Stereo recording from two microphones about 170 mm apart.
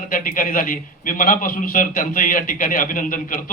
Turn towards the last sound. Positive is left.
turn(degrees=50)  # may be behind; listen again after turning